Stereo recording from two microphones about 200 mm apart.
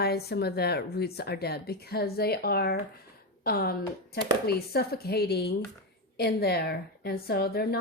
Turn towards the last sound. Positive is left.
turn(degrees=50)  # may be behind; listen again after turning